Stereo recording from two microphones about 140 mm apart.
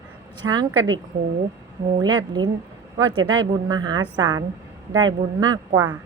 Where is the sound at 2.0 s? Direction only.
30° right (ahead or behind).